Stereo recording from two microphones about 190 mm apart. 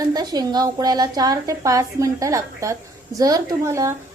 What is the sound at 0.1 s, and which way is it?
A woman's voice, 20° right (ahead or behind).